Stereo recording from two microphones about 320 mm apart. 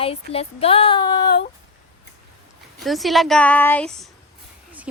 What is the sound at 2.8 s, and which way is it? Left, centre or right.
A woman's voice, centre.